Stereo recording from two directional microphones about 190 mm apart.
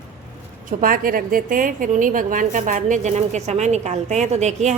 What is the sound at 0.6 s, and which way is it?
A woman's voice, 45° right (ahead or behind).